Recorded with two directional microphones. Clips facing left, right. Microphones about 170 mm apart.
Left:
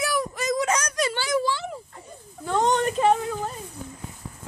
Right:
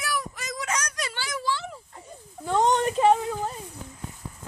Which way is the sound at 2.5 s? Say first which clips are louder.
Even; 15° right (ahead or behind).